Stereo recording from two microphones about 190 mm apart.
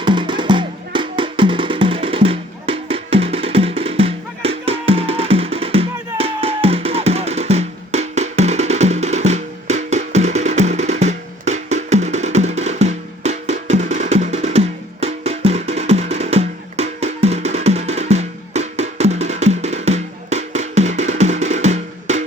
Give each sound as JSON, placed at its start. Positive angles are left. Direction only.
{"t": 0.0, "sound": "music", "side_deg": -25}